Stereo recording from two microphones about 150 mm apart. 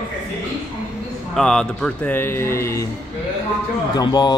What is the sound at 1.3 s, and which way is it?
Speech, 5° left (ahead or behind).